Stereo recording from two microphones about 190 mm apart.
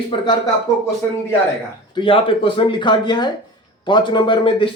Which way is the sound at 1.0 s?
15° left (ahead or behind).